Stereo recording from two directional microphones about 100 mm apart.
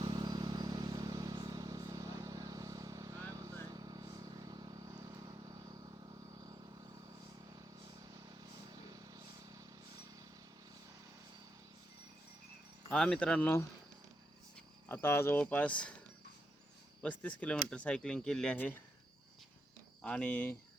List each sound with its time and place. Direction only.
0.0 s vehicle: 50° right (ahead or behind)
8.1 s vehicle: 45° right (ahead or behind)
12.9 s speech: 10° left (ahead or behind)
14.5 s cricket: 20° left (ahead or behind)
15.4 s speech: 15° left (ahead or behind)
20.0 s speech: 10° left (ahead or behind)